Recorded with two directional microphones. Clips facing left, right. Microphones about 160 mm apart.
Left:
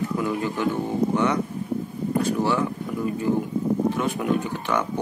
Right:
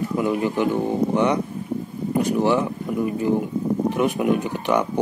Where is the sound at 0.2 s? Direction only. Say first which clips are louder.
Right 6 dB; 15° right (ahead or behind).